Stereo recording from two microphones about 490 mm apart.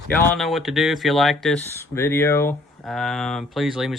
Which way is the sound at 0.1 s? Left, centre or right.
Centre.